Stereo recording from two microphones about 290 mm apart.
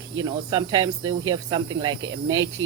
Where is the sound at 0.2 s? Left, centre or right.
Centre.